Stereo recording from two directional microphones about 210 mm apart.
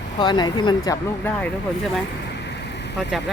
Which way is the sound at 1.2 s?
5° left (ahead or behind).